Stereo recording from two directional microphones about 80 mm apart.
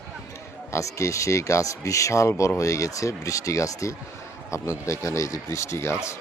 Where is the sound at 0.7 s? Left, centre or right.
Left.